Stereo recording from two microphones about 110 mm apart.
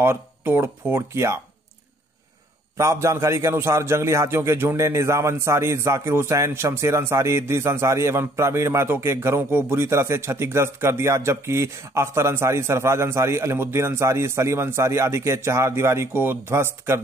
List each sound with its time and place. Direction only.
0.0 s a man's voice: 20° right (ahead or behind)
2.8 s a man's voice: 25° right (ahead or behind)